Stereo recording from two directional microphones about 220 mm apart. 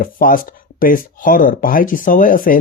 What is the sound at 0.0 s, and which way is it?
A man's voice, 40° left (ahead or behind).